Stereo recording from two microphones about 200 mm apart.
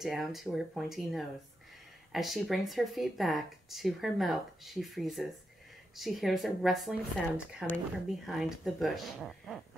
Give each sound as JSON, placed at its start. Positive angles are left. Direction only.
{"t": 0.0, "sound": "speech", "side_deg": 0}